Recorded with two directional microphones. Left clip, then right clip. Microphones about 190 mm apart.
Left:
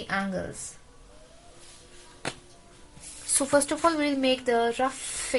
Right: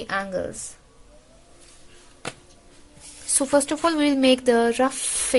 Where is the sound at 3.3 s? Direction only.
25° right (ahead or behind).